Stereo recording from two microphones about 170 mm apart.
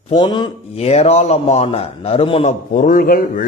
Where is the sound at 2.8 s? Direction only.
55° left (ahead or behind).